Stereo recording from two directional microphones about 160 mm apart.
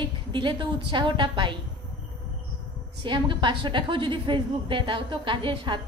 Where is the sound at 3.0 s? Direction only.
30° right (ahead or behind).